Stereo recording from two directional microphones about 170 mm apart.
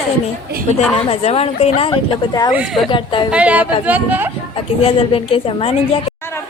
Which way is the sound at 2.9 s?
30° left (ahead or behind).